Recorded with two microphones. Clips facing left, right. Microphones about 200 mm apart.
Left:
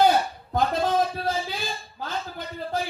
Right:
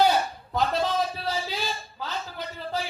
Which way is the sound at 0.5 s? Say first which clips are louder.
Left 2 dB; 50° left (ahead or behind).